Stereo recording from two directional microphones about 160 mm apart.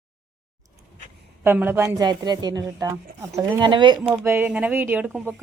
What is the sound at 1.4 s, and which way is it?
Speech, 10° right (ahead or behind).